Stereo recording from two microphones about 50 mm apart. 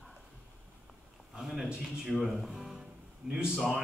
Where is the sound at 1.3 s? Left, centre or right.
Centre.